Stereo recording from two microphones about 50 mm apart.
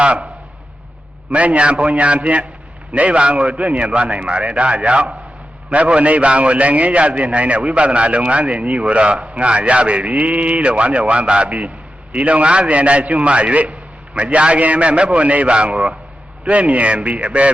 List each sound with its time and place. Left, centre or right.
1.3 s a man's voice: right